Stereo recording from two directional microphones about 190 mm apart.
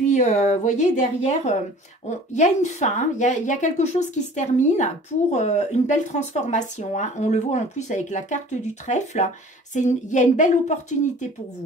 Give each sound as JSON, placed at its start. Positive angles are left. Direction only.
{"t": 0.1, "sound": "a woman's voice", "side_deg": 40}